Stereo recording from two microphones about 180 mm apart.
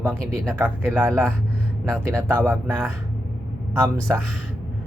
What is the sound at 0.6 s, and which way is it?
Speech, 10° right (ahead or behind).